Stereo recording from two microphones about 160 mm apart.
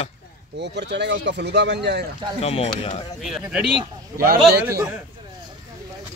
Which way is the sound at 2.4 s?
40° left (ahead or behind).